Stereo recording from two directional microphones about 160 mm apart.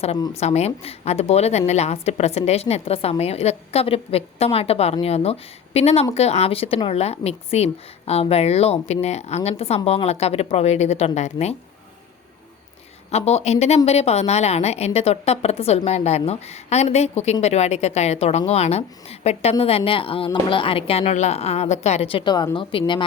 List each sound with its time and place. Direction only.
0.3 s a woman's voice: 45° left (ahead or behind)
13.1 s a woman's voice: 40° left (ahead or behind)